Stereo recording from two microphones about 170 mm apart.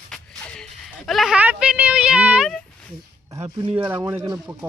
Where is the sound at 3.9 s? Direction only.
15° right (ahead or behind).